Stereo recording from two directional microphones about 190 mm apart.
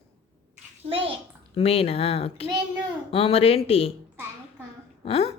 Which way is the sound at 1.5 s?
30° left (ahead or behind).